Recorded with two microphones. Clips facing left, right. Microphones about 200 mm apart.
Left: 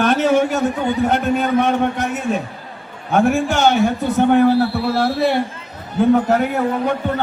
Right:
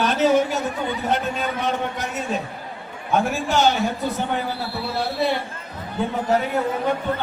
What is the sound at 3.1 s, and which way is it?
A man's voice, 55° left (ahead or behind).